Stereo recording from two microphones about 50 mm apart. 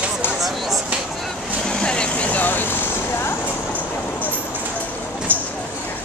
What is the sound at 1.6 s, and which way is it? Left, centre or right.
Vehicle, centre.